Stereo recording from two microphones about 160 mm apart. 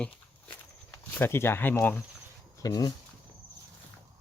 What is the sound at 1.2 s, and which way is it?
Speech, 15° left (ahead or behind).